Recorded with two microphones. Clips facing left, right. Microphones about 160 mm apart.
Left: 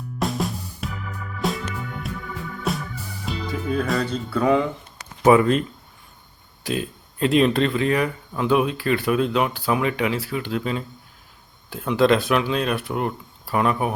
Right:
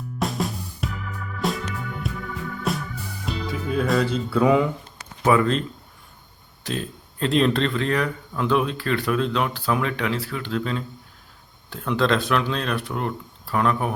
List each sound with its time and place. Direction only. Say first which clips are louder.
0.2 s music: left 1 dB; centre (ahead or behind)
3.2 s speech: left 1 dB; centre (ahead or behind)
5.2 s speech: left 4 dB; 20° left (ahead or behind)